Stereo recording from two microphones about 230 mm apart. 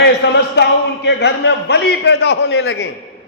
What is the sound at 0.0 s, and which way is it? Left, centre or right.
A man's voice, left.